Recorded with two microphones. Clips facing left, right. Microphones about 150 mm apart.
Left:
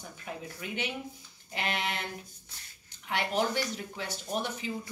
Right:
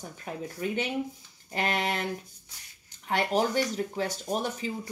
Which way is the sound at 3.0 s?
40° right (ahead or behind).